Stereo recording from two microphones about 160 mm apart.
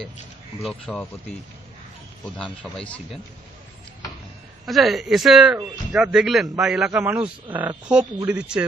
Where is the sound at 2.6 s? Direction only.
10° left (ahead or behind).